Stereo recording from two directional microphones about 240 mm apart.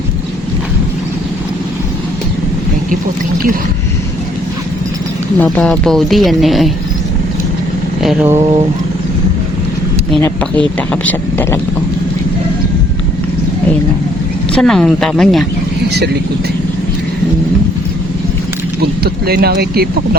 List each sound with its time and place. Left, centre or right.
5.4 s speech: centre
8.0 s speech: centre
8.4 s speech: right
10.2 s speech: centre
14.5 s speech: centre
18.8 s speech: right